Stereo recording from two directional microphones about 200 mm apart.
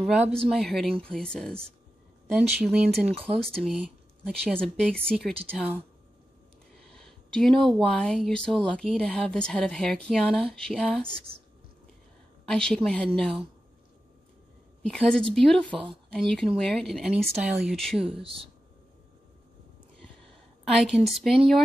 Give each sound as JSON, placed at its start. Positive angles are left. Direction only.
{"t": 0.0, "sound": "speech", "side_deg": 0}
{"t": 6.9, "sound": "speech", "side_deg": 5}
{"t": 12.4, "sound": "speech", "side_deg": 5}
{"t": 14.8, "sound": "a woman's voice", "side_deg": 0}
{"t": 18.0, "sound": "speech", "side_deg": -30}
{"t": 20.7, "sound": "speech", "side_deg": 0}